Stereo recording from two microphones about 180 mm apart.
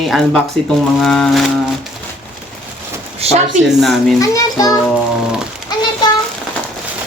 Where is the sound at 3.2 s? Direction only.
35° right (ahead or behind).